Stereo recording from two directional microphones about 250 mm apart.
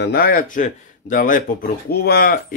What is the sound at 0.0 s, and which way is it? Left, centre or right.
Speech, left.